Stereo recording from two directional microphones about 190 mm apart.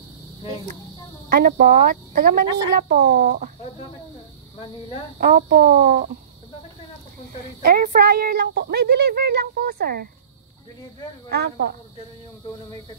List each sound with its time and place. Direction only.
1.3 s speech: 50° right (ahead or behind)
5.2 s speech: 50° right (ahead or behind)
7.6 s speech: 50° right (ahead or behind)
11.2 s speech: 60° right (ahead or behind)